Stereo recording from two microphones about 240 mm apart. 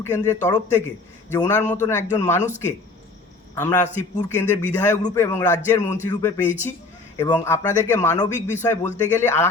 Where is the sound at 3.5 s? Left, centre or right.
Centre.